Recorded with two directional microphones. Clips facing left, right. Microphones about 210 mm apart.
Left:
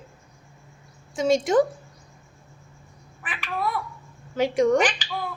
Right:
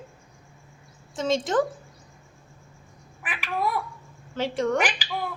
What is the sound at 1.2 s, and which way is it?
Speech, 10° left (ahead or behind).